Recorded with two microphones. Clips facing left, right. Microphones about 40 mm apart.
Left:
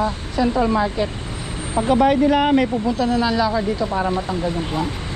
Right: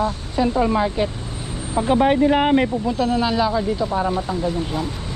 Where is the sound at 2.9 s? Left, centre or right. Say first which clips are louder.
Even; centre.